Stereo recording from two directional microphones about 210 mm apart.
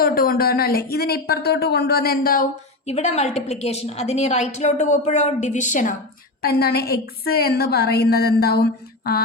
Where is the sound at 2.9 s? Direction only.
30° left (ahead or behind).